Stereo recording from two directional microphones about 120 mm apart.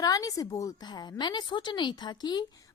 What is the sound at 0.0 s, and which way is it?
A woman's voice, 30° left (ahead or behind).